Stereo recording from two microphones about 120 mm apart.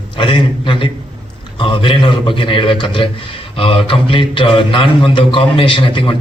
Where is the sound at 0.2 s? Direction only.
45° left (ahead or behind).